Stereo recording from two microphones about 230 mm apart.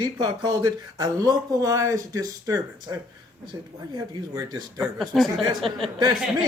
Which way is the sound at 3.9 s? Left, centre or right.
Centre.